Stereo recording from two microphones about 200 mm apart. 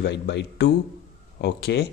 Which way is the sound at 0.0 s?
60° left (ahead or behind).